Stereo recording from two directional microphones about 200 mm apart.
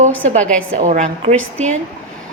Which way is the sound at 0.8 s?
35° right (ahead or behind).